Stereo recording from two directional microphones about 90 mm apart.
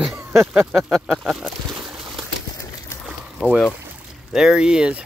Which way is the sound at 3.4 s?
10° right (ahead or behind).